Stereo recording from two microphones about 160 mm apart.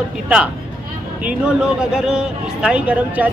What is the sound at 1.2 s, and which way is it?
Speech, 5° right (ahead or behind).